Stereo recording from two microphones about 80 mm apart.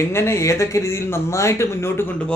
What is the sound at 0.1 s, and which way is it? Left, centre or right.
Speech, left.